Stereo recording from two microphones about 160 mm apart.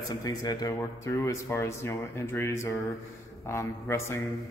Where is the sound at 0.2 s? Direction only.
25° left (ahead or behind).